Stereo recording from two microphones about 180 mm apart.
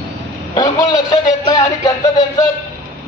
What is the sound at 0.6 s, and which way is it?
Speech, 20° left (ahead or behind).